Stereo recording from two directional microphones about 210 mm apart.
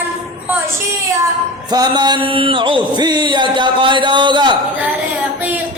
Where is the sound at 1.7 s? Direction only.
20° right (ahead or behind).